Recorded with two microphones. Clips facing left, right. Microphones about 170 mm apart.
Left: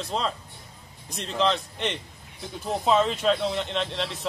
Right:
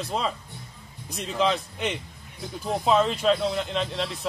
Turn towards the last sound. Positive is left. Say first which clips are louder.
# right 1 dB
turn(degrees=0)  # may be behind; listen again after turning